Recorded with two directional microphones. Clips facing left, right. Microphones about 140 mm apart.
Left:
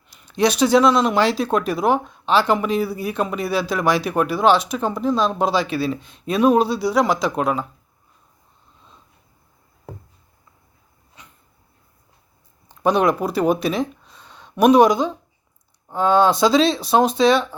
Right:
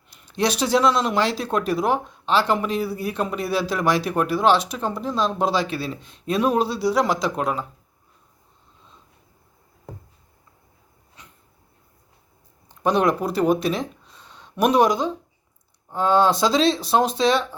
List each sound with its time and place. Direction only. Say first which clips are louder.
0.1 s speech: left 4 dB; centre (ahead or behind)
7.3 s speech: left 3 dB; 20° left (ahead or behind)
12.9 s speech: left 2 dB; 5° left (ahead or behind)